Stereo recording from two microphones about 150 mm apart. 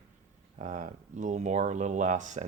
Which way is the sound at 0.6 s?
55° right (ahead or behind).